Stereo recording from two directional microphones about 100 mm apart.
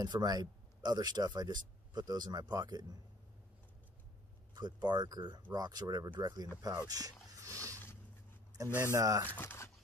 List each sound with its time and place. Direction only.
0.0 s speech: 45° right (ahead or behind)
4.6 s speech: 45° right (ahead or behind)
6.9 s a sound: 40° right (ahead or behind)
8.6 s speech: 35° right (ahead or behind)
9.3 s speech: 20° left (ahead or behind)